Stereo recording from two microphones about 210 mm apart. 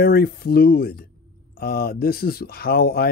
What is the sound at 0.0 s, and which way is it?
Speech, 45° left (ahead or behind).